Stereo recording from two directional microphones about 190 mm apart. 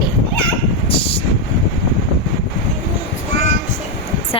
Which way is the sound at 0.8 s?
30° left (ahead or behind).